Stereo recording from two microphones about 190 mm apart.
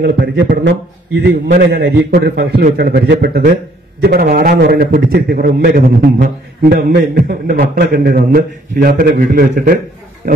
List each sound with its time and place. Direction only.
0.0 s a man's voice: 60° right (ahead or behind)